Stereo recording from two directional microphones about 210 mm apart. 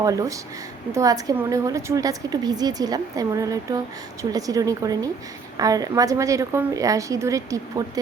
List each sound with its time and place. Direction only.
0.0 s a woman's voice: 15° right (ahead or behind)